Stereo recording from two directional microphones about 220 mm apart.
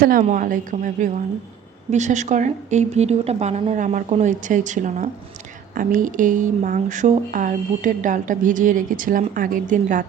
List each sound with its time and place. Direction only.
0.0 s speech: 40° right (ahead or behind)